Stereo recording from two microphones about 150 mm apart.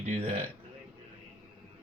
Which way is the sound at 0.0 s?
50° right (ahead or behind).